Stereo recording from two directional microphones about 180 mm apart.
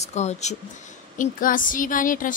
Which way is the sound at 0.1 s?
40° left (ahead or behind).